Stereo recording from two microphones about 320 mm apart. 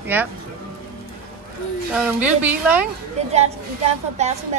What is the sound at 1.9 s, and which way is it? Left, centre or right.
Speech, centre.